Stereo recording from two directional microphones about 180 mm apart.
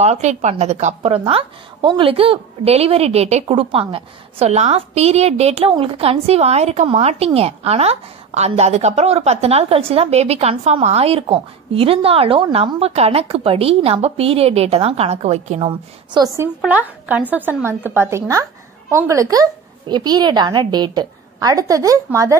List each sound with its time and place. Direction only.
0.0 s a woman's voice: 40° right (ahead or behind)
16.1 s a woman's voice: 20° right (ahead or behind)
16.6 s a woman's voice: 10° right (ahead or behind)